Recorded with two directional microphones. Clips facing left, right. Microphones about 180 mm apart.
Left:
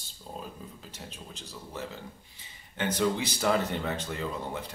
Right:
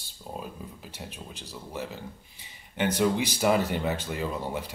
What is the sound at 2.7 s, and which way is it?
Speech, 15° right (ahead or behind).